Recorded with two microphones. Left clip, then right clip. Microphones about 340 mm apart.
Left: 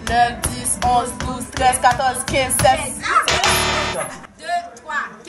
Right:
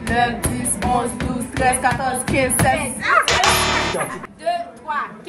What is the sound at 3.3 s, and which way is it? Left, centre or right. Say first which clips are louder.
Music: right 1 dB; centre.